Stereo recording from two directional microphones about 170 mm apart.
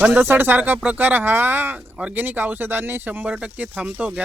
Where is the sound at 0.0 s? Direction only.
10° right (ahead or behind).